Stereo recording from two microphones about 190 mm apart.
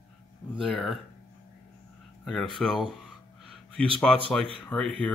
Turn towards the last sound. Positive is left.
turn(degrees=5)  # may be behind; listen again after turning